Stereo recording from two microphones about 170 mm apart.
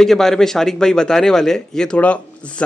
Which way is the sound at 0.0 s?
Centre (ahead or behind).